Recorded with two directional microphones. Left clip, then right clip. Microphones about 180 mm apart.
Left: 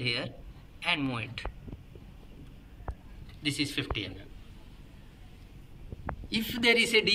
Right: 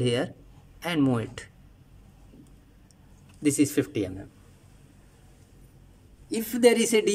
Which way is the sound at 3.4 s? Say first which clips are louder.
Right 7 dB; 65° right (ahead or behind).